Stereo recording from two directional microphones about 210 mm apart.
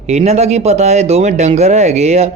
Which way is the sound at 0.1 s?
30° right (ahead or behind).